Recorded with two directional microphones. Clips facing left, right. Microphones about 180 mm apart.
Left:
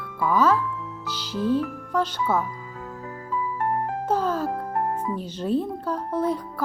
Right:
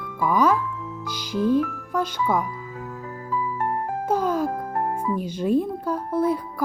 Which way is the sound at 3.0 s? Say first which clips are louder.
Right 1 dB; 25° right (ahead or behind).